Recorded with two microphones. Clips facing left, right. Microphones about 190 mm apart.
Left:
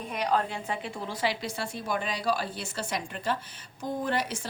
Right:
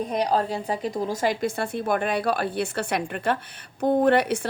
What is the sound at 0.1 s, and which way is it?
A woman's voice, 35° right (ahead or behind).